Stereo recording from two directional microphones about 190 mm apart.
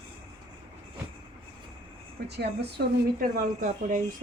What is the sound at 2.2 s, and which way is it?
Speech, 60° right (ahead or behind).